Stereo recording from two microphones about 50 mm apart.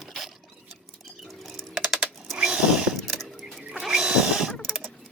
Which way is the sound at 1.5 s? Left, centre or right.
Centre.